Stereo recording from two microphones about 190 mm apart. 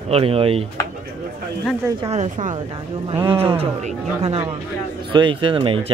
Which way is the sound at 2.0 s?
35° right (ahead or behind).